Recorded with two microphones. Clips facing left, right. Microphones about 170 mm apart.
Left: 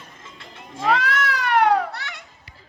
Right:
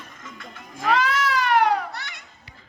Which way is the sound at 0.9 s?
65° left (ahead or behind).